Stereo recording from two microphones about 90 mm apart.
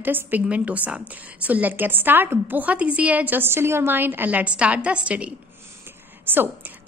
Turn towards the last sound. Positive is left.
turn(degrees=-25)  # may be behind; listen again after turning